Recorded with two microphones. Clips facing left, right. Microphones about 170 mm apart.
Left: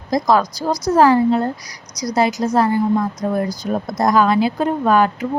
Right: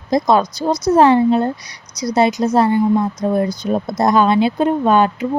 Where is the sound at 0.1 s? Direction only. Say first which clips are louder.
Right 2 dB; 25° right (ahead or behind).